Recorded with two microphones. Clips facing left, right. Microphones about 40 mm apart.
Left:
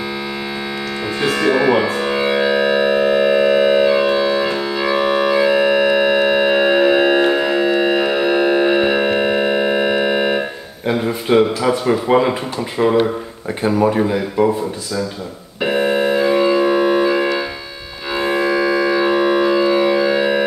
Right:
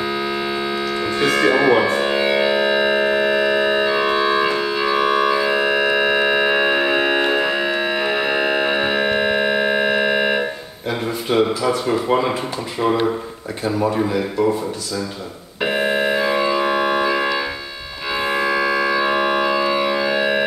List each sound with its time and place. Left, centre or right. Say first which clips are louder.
1.4 s speech: left 1 dB; centre
2.1 s keyboard: left 4 dB; centre
2.9 s organ: left 3 dB; centre
9.2 s a sound: left 2 dB; right
9.5 s organ: left 2 dB; right
10.9 s speech: left 5 dB; centre
15.6 s organ: left 3 dB; right
16.2 s organ: left 4 dB; centre
16.5 s organ: left 4 dB; right
17.0 s organ: left 3 dB; centre
18.3 s organ: left 3 dB; centre
19.1 s organ: left 3 dB; centre